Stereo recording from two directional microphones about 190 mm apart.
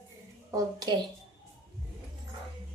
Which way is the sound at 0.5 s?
20° right (ahead or behind).